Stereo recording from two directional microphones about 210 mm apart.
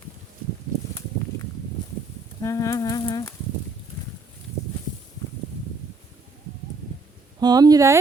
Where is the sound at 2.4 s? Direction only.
15° left (ahead or behind).